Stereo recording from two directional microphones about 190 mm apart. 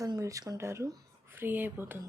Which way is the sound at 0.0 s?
15° right (ahead or behind).